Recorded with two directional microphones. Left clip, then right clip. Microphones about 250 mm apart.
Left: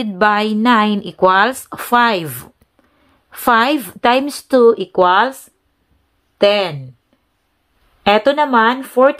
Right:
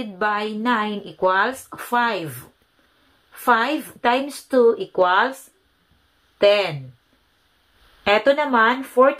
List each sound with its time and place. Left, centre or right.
0.0 s speech: left
6.3 s speech: left
8.0 s speech: left